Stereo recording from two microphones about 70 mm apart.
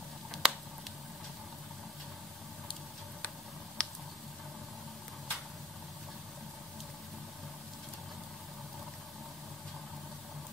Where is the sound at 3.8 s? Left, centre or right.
Centre.